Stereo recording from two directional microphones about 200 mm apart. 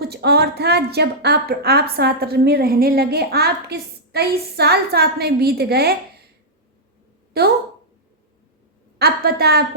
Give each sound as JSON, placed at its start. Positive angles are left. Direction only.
{"t": 0.0, "sound": "a woman's voice", "side_deg": -55}
{"t": 7.3, "sound": "a woman's voice", "side_deg": -50}
{"t": 9.0, "sound": "a woman's voice", "side_deg": -50}